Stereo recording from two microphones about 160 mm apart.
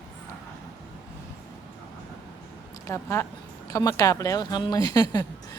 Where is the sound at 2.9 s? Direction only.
20° left (ahead or behind).